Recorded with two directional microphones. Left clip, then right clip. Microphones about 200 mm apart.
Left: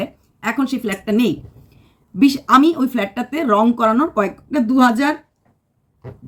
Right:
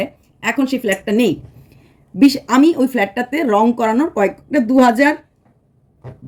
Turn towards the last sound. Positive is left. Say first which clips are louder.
# right 3 dB
turn(degrees=-5)  # may be behind; listen again after turning